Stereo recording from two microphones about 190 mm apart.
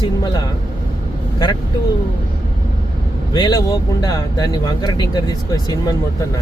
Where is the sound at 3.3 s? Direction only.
20° left (ahead or behind).